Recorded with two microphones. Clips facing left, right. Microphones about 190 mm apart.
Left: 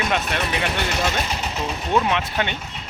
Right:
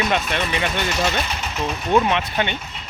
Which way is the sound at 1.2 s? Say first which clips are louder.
Left 2 dB; 35° left (ahead or behind).